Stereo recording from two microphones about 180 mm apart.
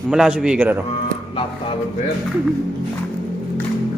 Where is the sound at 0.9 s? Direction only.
30° left (ahead or behind).